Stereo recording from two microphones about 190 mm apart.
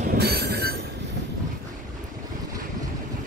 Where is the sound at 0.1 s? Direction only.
55° right (ahead or behind).